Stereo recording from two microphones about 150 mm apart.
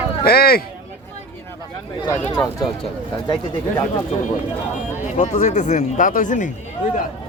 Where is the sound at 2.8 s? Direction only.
30° left (ahead or behind).